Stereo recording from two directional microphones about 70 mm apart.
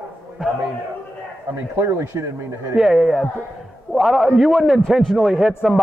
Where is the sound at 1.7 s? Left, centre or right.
Right.